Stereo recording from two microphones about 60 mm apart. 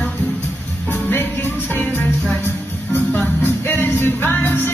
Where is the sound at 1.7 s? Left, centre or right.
Left.